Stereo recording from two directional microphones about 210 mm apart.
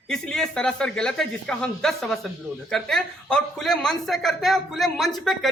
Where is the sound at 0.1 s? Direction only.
5° left (ahead or behind).